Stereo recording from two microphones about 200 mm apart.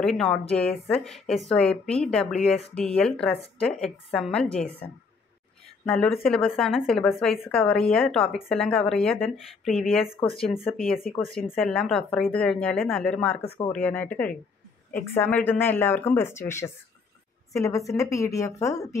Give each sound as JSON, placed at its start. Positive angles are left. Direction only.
{"t": 0.0, "sound": "a woman's voice", "side_deg": 0}
{"t": 5.9, "sound": "a woman's voice", "side_deg": 5}